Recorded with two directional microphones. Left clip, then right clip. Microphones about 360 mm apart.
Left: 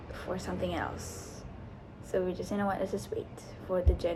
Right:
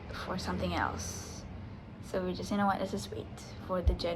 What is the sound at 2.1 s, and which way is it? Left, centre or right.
A woman's voice, centre.